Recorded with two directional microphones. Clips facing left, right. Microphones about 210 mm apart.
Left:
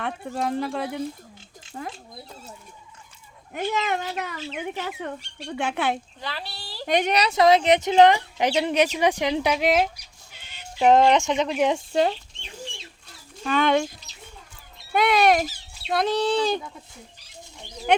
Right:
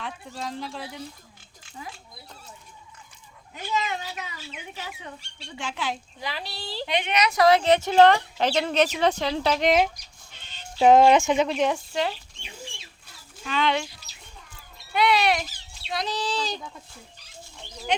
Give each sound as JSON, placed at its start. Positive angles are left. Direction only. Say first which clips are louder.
{"t": 0.0, "sound": "speech", "louder": "left 7 dB", "side_deg": 55}
{"t": 3.5, "sound": "speech", "louder": "left 4 dB", "side_deg": 55}
{"t": 6.1, "sound": "speech", "louder": "right 1 dB", "side_deg": -15}
{"t": 6.8, "sound": "speech", "louder": "left 4 dB", "side_deg": 45}
{"t": 11.9, "sound": "speech", "louder": "left 9 dB", "side_deg": 35}
{"t": 13.4, "sound": "speech", "louder": "left 5 dB", "side_deg": 50}
{"t": 17.9, "sound": "speech", "louder": "left 6 dB", "side_deg": 55}